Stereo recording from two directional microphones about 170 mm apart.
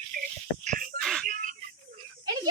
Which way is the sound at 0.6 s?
50° right (ahead or behind).